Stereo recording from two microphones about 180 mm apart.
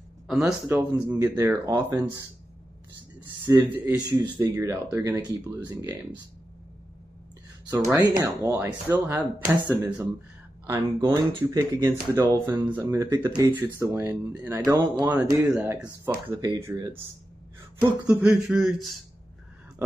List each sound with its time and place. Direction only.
0.3 s speech: 10° right (ahead or behind)
3.4 s speech: 25° right (ahead or behind)
4.4 s speech: 10° right (ahead or behind)
7.7 s speech: 20° right (ahead or behind)
16.3 s speech: 20° right (ahead or behind)
18.0 s speech: 5° right (ahead or behind)